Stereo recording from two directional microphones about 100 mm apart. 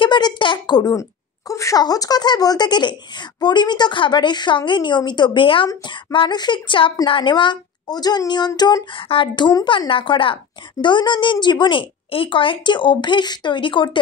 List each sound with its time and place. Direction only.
0.0 s speech: 50° left (ahead or behind)
1.5 s speech: 35° left (ahead or behind); by 5.7 s 60° left (ahead or behind)
6.1 s speech: 50° left (ahead or behind)